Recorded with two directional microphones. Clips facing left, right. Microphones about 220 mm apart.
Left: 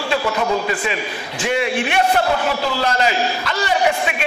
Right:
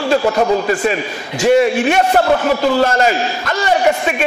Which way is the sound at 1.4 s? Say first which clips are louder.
Right 9 dB; 40° right (ahead or behind).